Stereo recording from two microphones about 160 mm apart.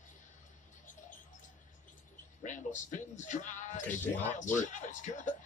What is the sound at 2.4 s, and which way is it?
Speech, 50° left (ahead or behind).